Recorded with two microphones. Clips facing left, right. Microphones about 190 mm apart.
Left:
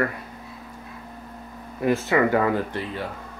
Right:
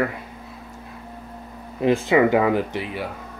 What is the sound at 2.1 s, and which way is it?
Speech, 15° right (ahead or behind).